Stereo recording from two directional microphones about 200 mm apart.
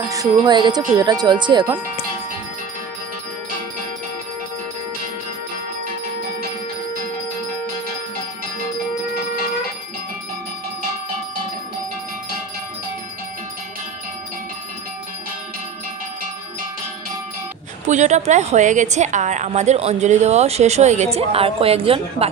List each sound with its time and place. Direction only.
0.1 s speech: 20° right (ahead or behind)
17.8 s a woman's voice: 35° right (ahead or behind)